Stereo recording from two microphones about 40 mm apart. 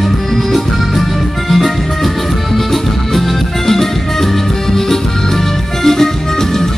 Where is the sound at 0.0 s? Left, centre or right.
Centre.